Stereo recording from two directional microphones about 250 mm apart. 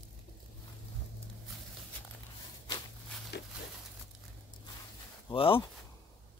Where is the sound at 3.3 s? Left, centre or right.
Left.